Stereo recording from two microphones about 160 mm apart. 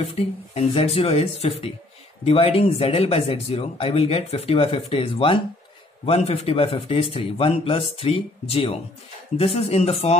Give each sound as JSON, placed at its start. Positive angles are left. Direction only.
{"t": 0.0, "sound": "speech", "side_deg": 35}